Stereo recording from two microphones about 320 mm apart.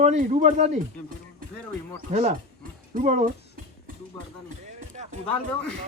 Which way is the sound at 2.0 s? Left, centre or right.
Centre.